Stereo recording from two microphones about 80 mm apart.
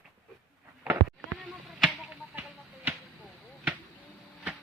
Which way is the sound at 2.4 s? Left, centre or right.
Centre.